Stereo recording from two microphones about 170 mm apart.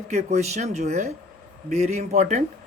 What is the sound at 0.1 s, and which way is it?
Speech, 40° right (ahead or behind).